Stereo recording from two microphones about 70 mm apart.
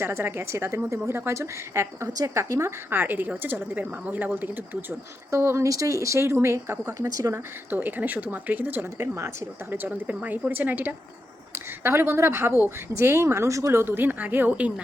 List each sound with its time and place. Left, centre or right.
0.0 s a woman's voice: right
5.3 s a woman's voice: right
5.6 s speech: right
7.1 s speech: right
7.3 s a woman's voice: right
9.0 s a woman's voice: right
13.8 s a woman's voice: right